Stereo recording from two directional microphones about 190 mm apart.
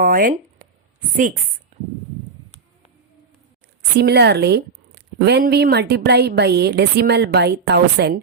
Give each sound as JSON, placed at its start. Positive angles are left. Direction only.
{"t": 0.0, "sound": "a sound", "side_deg": -50}
{"t": 1.1, "sound": "a woman's voice", "side_deg": -45}
{"t": 3.9, "sound": "speech", "side_deg": -60}